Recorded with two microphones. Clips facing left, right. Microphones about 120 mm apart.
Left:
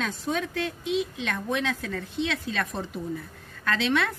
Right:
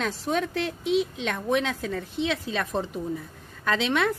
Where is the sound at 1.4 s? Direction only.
25° right (ahead or behind).